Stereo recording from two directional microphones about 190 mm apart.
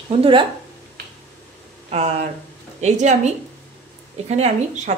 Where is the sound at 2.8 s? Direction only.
35° right (ahead or behind).